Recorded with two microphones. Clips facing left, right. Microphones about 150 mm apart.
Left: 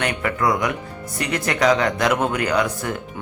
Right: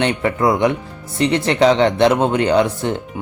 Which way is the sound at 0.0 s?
25° right (ahead or behind).